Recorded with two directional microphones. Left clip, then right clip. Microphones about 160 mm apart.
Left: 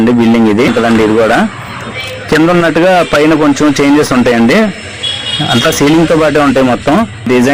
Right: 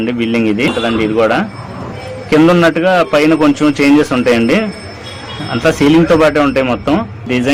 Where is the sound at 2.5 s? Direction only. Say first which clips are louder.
Left 4 dB; 40° left (ahead or behind).